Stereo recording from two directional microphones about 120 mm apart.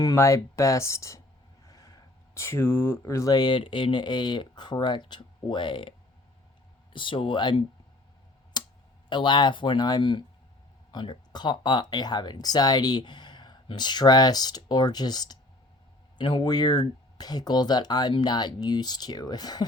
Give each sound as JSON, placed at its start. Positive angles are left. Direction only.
{"t": 0.1, "sound": "speech", "side_deg": 25}
{"t": 6.9, "sound": "speech", "side_deg": 45}
{"t": 8.6, "sound": "tick", "side_deg": 35}
{"t": 9.0, "sound": "speech", "side_deg": 40}